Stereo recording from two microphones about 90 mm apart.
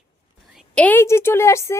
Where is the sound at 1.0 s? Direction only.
30° left (ahead or behind).